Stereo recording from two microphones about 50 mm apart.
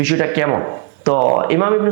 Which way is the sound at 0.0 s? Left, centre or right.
Right.